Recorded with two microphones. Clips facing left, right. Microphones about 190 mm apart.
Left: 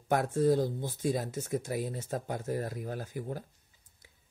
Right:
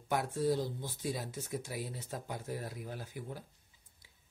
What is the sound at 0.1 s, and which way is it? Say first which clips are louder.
Speech: left 6 dB; 50° left (ahead or behind).